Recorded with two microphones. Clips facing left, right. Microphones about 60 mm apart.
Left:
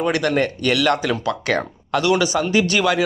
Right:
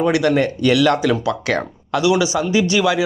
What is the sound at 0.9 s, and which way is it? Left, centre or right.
Speech, centre.